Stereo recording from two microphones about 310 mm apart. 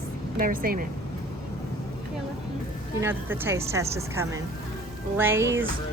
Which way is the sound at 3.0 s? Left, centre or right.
Centre.